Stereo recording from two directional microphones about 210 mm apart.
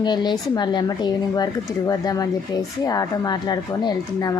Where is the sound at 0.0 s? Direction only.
20° left (ahead or behind).